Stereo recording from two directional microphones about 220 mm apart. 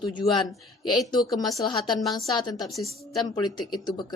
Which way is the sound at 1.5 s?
20° left (ahead or behind).